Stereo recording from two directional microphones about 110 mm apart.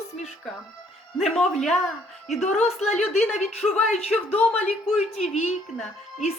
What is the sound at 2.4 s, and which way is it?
Speech, 90° left.